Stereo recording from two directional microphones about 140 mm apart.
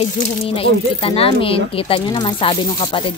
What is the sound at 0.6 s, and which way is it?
Speech, 40° left (ahead or behind).